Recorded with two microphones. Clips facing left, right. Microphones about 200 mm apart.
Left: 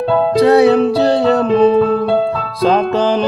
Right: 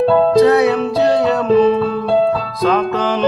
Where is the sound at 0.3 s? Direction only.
30° left (ahead or behind).